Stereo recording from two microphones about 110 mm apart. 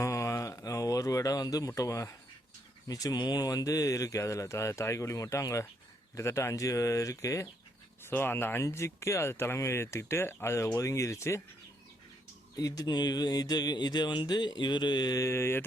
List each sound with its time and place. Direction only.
0.0 s a sound: 30° left (ahead or behind)
2.8 s speech: 35° left (ahead or behind)
8.0 s speech: 20° left (ahead or behind)
12.5 s speech: 35° left (ahead or behind)